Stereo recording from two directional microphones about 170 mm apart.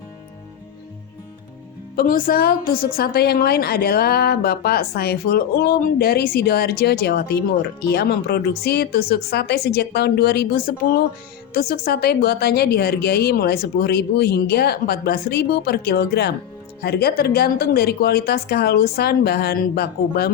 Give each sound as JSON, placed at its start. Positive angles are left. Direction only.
{"t": 2.0, "sound": "a woman's voice", "side_deg": 55}